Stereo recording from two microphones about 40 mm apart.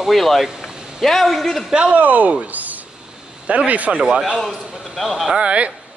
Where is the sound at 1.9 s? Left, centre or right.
Right.